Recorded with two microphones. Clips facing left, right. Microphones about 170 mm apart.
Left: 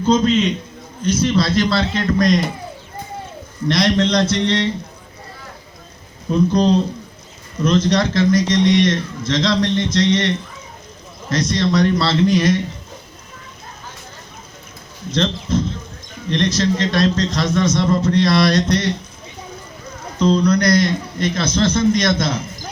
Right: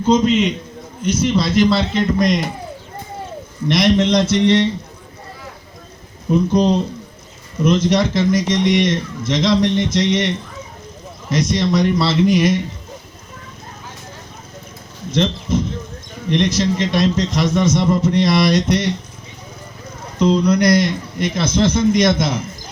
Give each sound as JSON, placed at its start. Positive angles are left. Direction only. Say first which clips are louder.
{"t": 0.0, "sound": "a man's voice", "louder": "right 1 dB", "side_deg": -20}
{"t": 3.7, "sound": "a man's voice", "louder": "right 2 dB", "side_deg": -20}
{"t": 6.3, "sound": "a man's voice", "louder": "even", "side_deg": -20}
{"t": 15.1, "sound": "a man's voice", "louder": "right 1 dB", "side_deg": -20}
{"t": 20.1, "sound": "a man's voice", "louder": "right 1 dB", "side_deg": -20}